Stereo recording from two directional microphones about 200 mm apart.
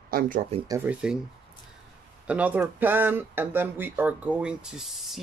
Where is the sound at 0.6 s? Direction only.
10° right (ahead or behind).